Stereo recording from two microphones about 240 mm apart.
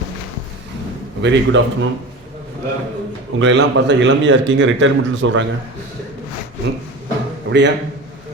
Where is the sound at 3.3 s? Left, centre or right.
Right.